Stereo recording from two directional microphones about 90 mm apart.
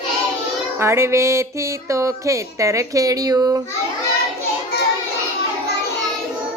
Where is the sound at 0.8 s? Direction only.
30° right (ahead or behind); by 3.6 s 45° right (ahead or behind).